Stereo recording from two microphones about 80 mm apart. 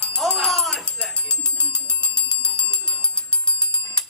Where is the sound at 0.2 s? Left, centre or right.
Centre.